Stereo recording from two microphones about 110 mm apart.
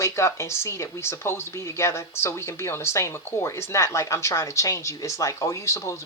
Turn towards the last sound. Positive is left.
turn(degrees=25)  # may be behind; listen again after turning